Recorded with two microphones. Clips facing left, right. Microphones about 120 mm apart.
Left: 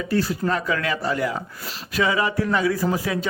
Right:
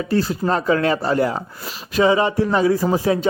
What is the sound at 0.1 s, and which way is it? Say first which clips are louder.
Speech: right 3 dB; 25° right (ahead or behind).